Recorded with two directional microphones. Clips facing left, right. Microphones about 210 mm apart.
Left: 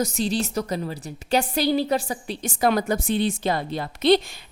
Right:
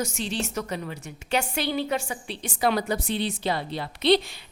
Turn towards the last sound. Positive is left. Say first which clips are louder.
# left 3 dB
turn(degrees=45)  # may be behind; listen again after turning